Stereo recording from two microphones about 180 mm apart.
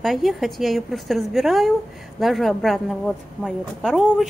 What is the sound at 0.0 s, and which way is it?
A woman's voice, centre (ahead or behind).